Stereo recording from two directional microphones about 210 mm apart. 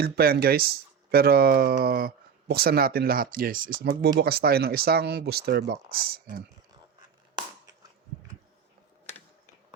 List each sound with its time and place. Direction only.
0.0 s speech: 45° right (ahead or behind)